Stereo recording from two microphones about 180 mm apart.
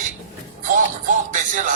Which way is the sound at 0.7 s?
45° right (ahead or behind).